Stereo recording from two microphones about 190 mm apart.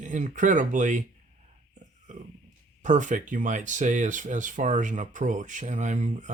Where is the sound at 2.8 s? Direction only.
40° right (ahead or behind).